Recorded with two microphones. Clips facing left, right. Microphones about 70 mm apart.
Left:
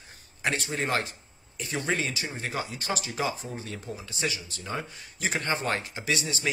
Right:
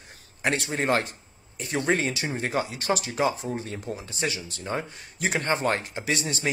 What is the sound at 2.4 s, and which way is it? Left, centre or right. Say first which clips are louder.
Speech: right 5 dB; right.